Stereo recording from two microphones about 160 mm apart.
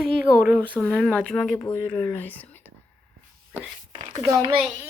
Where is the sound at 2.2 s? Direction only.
10° left (ahead or behind).